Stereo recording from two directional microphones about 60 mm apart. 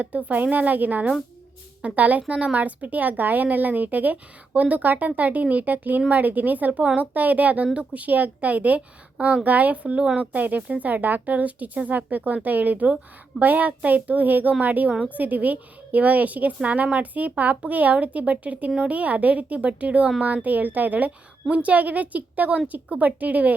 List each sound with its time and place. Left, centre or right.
0.0 s speech: right